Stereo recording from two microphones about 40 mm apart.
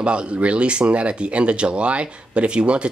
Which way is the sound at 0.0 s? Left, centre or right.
Right.